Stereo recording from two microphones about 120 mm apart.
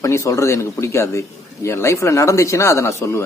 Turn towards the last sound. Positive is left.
turn(degrees=25)  # may be behind; listen again after turning